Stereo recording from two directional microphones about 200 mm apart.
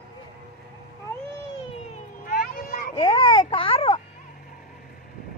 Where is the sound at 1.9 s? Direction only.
45° left (ahead or behind).